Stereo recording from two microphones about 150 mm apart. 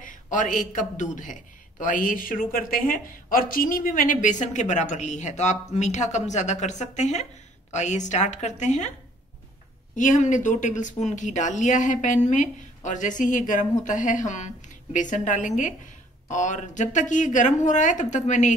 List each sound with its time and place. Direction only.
0.0 s a man's voice: 60° left (ahead or behind)
9.9 s a man's voice: 55° left (ahead or behind)